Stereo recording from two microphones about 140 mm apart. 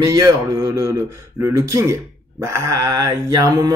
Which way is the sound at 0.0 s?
25° right (ahead or behind).